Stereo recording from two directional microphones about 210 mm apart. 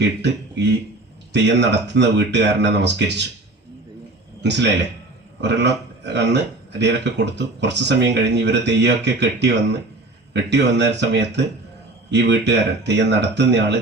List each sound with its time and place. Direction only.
0.2 s speech: 55° right (ahead or behind)
4.4 s speech: 55° right (ahead or behind)